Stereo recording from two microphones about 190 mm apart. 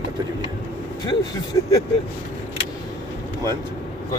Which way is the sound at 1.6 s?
15° left (ahead or behind).